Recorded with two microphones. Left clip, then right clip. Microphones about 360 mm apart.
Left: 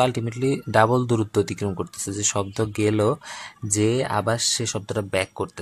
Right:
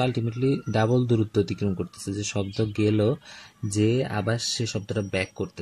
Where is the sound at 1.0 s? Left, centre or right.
Left.